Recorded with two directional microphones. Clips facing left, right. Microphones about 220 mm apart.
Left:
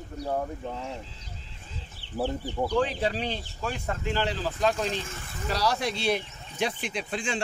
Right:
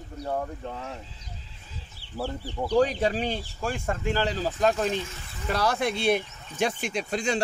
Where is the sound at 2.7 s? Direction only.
40° right (ahead or behind).